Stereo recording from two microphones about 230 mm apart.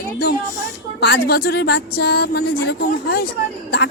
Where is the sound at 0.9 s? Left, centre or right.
Left.